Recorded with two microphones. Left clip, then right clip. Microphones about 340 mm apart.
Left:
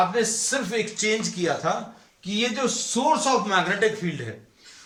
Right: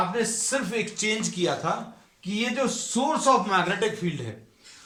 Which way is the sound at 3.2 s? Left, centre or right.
Centre.